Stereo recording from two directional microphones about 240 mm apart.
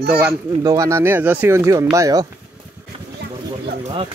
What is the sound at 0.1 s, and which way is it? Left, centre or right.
Speech, centre.